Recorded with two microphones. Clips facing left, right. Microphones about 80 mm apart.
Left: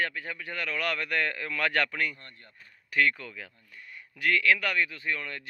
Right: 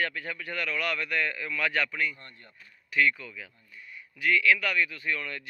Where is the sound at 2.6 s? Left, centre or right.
Left.